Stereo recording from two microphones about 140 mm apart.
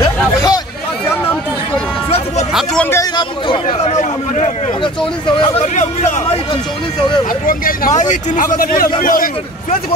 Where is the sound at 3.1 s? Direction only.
35° left (ahead or behind).